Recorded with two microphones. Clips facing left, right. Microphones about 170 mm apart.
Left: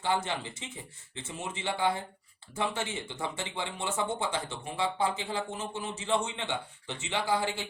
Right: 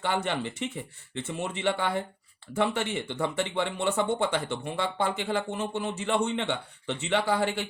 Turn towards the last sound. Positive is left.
turn(degrees=-65)  # may be behind; listen again after turning